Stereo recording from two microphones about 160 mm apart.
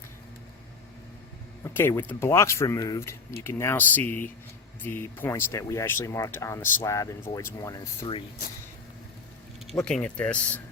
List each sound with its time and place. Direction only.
1.6 s speech: 15° left (ahead or behind)
9.7 s speech: 5° left (ahead or behind)